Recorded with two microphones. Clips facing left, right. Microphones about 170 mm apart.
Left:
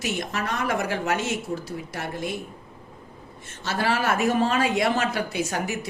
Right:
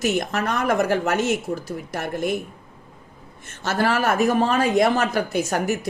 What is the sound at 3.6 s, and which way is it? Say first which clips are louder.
A woman's voice: right 4 dB; 45° right (ahead or behind).